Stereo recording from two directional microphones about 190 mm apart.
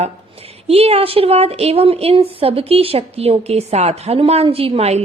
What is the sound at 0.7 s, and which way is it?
A woman's voice, 30° right (ahead or behind).